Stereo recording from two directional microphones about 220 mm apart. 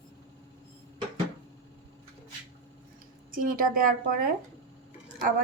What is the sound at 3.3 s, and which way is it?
Speech, 40° right (ahead or behind).